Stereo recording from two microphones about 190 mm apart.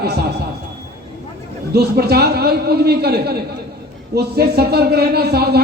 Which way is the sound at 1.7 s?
55° right (ahead or behind).